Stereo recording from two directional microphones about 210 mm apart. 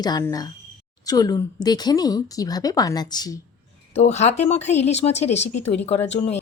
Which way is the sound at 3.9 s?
30° left (ahead or behind).